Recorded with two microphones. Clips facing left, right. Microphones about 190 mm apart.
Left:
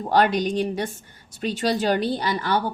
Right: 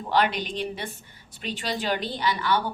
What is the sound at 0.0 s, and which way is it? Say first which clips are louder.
A woman's voice: left 5 dB; 45° left (ahead or behind).